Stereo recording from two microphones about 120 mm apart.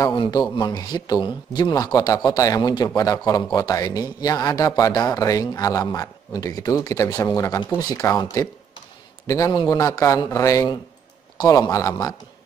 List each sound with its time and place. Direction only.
0.1 s a man's voice: 40° left (ahead or behind)
9.5 s a man's voice: 35° left (ahead or behind)
9.8 s a man's voice: 25° left (ahead or behind)